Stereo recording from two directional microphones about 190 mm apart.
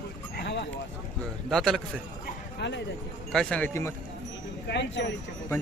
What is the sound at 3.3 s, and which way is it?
Speech, 5° left (ahead or behind).